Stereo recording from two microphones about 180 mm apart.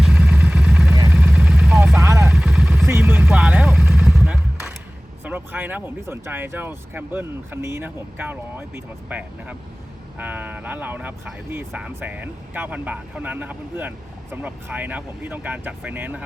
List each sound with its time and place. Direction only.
0.0 s vehicle: 5° right (ahead or behind)
2.0 s vehicle: 15° right (ahead or behind)
2.3 s vehicle: 5° right (ahead or behind)
5.2 s speech: 10° right (ahead or behind)